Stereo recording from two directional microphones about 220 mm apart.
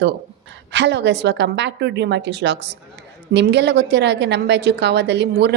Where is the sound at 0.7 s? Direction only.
50° right (ahead or behind).